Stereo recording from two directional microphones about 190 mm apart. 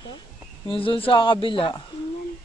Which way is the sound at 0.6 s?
30° left (ahead or behind).